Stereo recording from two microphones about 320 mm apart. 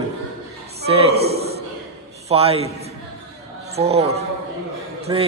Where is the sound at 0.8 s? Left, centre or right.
Centre.